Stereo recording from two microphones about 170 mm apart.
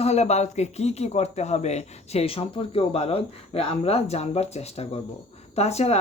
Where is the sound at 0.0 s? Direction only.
40° left (ahead or behind).